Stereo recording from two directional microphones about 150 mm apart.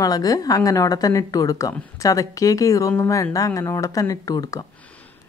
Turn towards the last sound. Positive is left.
turn(degrees=25)  # may be behind; listen again after turning